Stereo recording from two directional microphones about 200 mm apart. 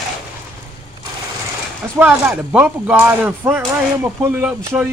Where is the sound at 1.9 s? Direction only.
10° right (ahead or behind).